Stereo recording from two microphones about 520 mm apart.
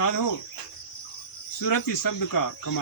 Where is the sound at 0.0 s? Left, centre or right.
Left.